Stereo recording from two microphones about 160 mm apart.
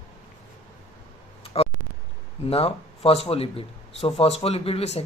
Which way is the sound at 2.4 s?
40° left (ahead or behind).